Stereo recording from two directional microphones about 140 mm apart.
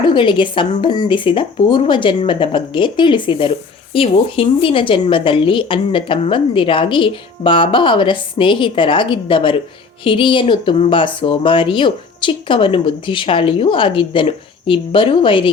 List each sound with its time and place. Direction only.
0.1 s a woman's voice: 35° left (ahead or behind)